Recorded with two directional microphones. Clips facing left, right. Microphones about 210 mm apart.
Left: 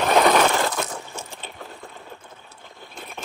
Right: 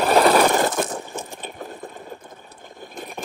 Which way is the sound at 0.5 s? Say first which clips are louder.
Right 4 dB; 45° right (ahead or behind).